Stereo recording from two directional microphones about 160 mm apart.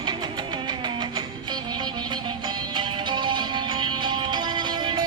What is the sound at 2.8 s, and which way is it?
Music, 30° right (ahead or behind).